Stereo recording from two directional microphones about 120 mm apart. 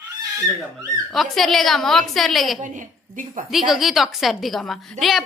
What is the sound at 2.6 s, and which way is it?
Speech, 90° right.